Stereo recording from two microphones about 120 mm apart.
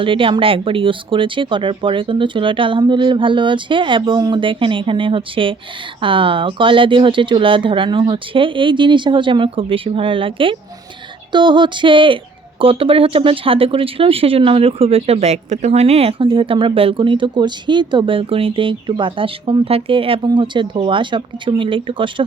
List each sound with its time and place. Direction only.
0.0 s speech: 45° right (ahead or behind)